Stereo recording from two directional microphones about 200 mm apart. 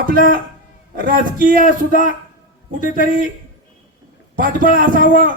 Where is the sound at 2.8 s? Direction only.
45° left (ahead or behind).